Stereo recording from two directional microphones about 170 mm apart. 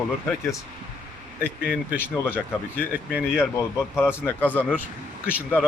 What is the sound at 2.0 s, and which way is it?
Speech, 10° left (ahead or behind).